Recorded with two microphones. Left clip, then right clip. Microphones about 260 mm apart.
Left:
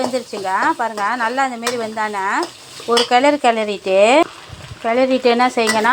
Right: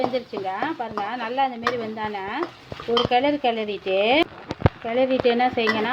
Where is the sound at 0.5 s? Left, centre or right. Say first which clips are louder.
Left 12 dB; centre.